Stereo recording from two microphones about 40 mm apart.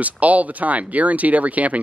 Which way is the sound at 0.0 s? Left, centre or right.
Right.